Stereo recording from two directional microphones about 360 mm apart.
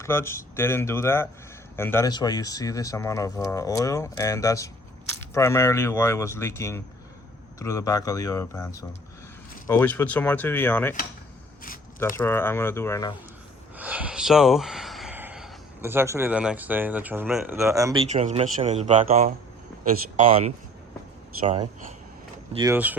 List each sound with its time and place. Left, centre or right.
0.0 s speech: centre
12.1 s speech: centre
13.7 s speech: centre; by 20.5 s right
22.5 s speech: centre